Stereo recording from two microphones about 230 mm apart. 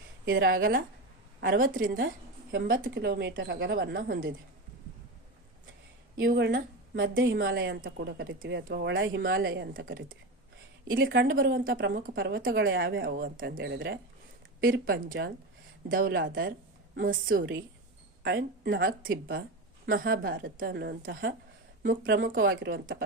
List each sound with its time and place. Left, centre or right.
0.3 s a woman's voice: right
6.1 s a woman's voice: right
10.9 s speech: right
13.6 s a woman's voice: right
16.1 s a woman's voice: right